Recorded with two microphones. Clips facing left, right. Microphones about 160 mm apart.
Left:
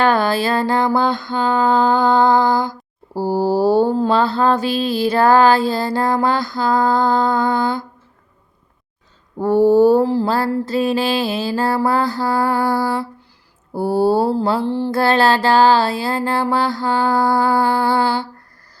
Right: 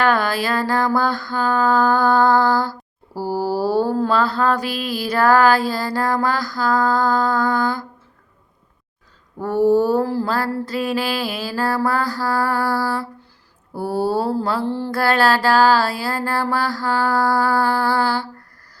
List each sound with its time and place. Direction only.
0.0 s mantra: 25° left (ahead or behind)
9.4 s mantra: 30° left (ahead or behind)